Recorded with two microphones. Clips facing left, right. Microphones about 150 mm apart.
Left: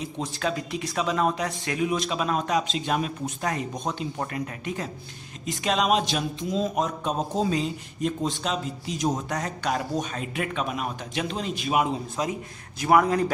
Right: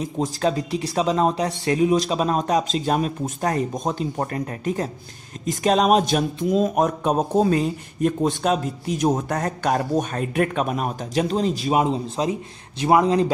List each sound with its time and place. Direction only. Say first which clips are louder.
0.0 s speech: right 7 dB; 35° right (ahead or behind)